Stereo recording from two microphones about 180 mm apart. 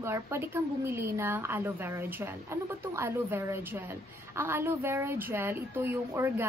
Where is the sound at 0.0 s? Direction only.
15° right (ahead or behind).